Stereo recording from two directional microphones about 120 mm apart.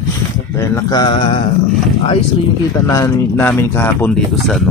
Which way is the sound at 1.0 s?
40° left (ahead or behind).